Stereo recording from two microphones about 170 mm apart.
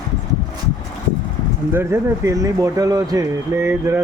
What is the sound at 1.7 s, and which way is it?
Speech, 15° right (ahead or behind).